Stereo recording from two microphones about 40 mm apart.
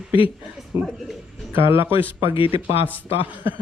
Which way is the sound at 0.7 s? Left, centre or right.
Right.